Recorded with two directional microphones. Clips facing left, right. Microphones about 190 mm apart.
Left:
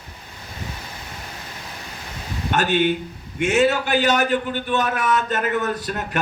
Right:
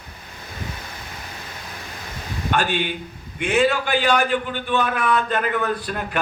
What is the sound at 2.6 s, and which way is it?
A man's voice, 45° left (ahead or behind).